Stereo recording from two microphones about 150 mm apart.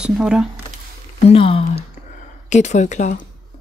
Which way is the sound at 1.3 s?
40° left (ahead or behind).